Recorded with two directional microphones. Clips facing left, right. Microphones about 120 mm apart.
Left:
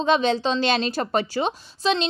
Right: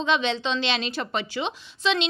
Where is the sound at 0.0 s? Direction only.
40° left (ahead or behind).